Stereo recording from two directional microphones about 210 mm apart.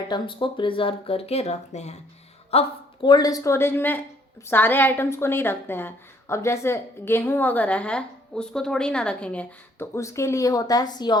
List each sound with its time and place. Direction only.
0.1 s a woman's voice: 25° left (ahead or behind)